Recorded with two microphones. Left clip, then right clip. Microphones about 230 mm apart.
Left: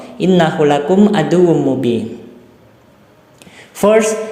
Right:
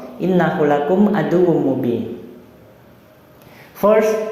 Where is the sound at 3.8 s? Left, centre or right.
Left.